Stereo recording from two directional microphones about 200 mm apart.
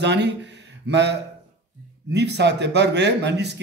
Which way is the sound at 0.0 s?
60° right (ahead or behind).